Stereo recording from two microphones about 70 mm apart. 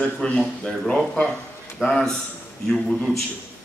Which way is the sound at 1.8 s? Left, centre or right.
Centre.